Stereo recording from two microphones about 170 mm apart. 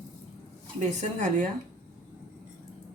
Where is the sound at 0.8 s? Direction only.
50° right (ahead or behind).